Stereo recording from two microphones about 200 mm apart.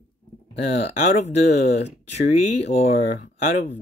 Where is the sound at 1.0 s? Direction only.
35° left (ahead or behind).